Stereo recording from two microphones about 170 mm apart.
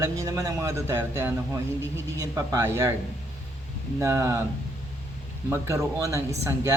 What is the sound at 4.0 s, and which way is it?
Speech, 20° right (ahead or behind).